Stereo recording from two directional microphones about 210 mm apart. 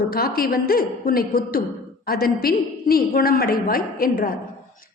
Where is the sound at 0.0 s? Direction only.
45° left (ahead or behind).